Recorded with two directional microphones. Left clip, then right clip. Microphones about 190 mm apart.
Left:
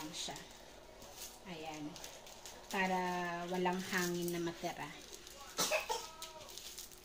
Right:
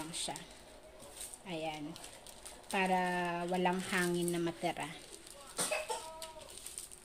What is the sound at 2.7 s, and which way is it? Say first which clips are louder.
Speech: right 4 dB; 55° right (ahead or behind).